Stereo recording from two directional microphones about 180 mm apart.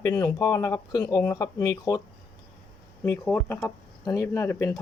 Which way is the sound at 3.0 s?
10° left (ahead or behind).